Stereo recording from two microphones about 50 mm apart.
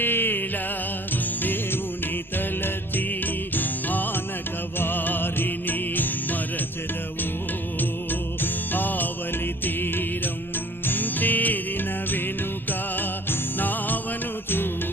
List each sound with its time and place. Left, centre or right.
0.0 s music: left
3.5 s music: left
8.4 s music: left
13.6 s music: left